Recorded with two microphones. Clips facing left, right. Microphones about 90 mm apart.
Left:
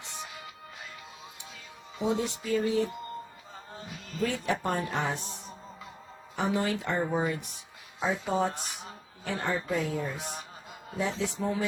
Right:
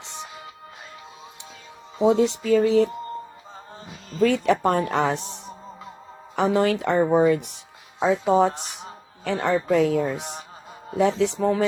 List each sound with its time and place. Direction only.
2.0 s speech: 80° right
4.2 s speech: 75° right (ahead or behind)
6.3 s a woman's voice: 85° right; by 7.5 s 70° right (ahead or behind)
7.9 s a woman's voice: 90° right